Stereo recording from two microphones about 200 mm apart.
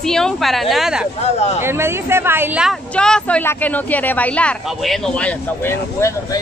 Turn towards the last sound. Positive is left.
turn(degrees=10)  # may be behind; listen again after turning